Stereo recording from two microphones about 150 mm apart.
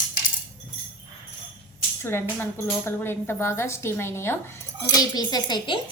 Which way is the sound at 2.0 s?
15° left (ahead or behind).